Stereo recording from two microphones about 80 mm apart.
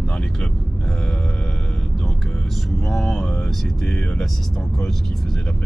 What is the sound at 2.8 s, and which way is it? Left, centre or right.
Vehicle, centre.